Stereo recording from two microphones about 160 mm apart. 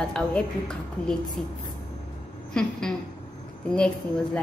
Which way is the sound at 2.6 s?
5° left (ahead or behind).